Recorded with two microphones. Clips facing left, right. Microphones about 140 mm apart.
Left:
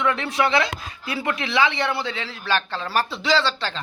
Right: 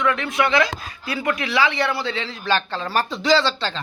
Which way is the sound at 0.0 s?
30° left (ahead or behind).